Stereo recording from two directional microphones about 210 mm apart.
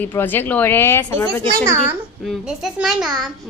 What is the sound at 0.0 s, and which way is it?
A woman's voice, 10° left (ahead or behind).